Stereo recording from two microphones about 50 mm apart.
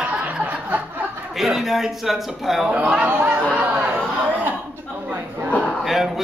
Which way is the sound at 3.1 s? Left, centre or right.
Right.